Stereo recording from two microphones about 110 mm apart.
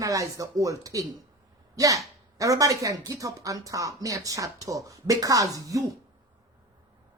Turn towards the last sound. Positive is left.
turn(degrees=-30)  # may be behind; listen again after turning